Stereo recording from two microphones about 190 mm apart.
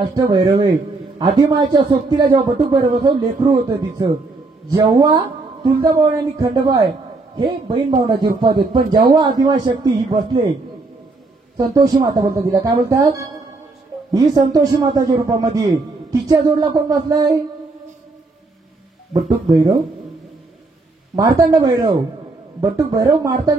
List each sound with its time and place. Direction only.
0.0 s speech: 20° right (ahead or behind)
11.5 s speech: 20° right (ahead or behind)
19.2 s speech: 20° right (ahead or behind)
21.2 s speech: 20° right (ahead or behind)